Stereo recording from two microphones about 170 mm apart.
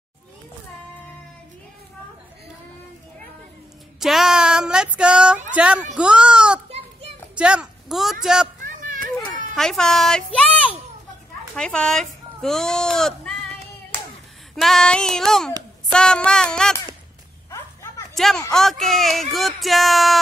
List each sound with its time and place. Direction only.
4.0 s a sound: centre (ahead or behind)
5.5 s speech: 5° right (ahead or behind)
5.9 s a sound: 5° right (ahead or behind)
6.7 s children playing: 35° right (ahead or behind)
7.3 s a woman's voice: 5° right (ahead or behind)
8.6 s children playing: 50° right (ahead or behind)
9.5 s a woman's voice: 5° left (ahead or behind)
14.5 s speech: centre (ahead or behind)
18.1 s speech: centre (ahead or behind)